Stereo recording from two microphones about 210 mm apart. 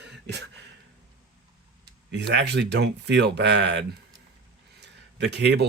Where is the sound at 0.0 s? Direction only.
55° right (ahead or behind).